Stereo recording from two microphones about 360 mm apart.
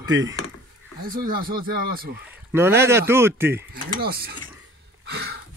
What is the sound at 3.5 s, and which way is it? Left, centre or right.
Speech, right.